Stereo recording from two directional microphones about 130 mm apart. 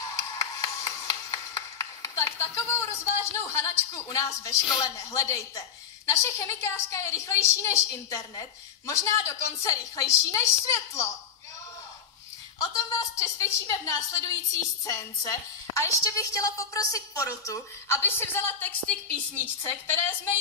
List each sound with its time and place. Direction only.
0.0 s a sound: 25° left (ahead or behind)
3.3 s a woman's voice: 20° left (ahead or behind)
12.5 s a woman's voice: 30° left (ahead or behind)